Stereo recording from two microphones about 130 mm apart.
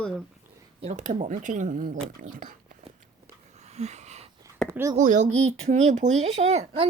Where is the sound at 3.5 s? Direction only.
60° right (ahead or behind).